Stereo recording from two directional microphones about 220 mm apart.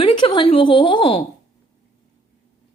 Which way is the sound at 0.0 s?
20° left (ahead or behind).